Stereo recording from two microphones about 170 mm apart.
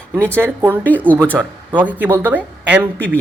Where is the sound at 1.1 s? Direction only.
10° right (ahead or behind).